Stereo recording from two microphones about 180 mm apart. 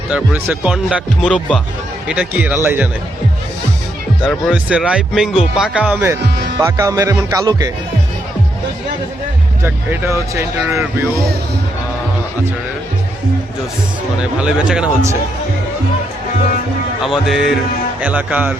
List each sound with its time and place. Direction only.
0.1 s speech: 10° right (ahead or behind)
4.2 s speech: 5° left (ahead or behind); by 7.7 s 20° right (ahead or behind)
9.6 s speech: 15° right (ahead or behind)
14.2 s speech: 5° right (ahead or behind)
17.0 s speech: 5° right (ahead or behind)